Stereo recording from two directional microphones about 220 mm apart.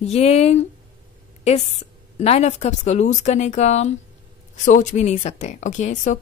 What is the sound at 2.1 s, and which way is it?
Speech, 30° left (ahead or behind).